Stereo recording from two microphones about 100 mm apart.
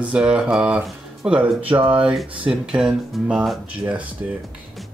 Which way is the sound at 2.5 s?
5° right (ahead or behind).